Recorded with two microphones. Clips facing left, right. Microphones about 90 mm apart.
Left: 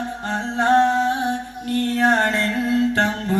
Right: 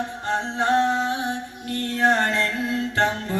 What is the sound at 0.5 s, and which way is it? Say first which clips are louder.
Singing: left 5 dB; 45° left (ahead or behind).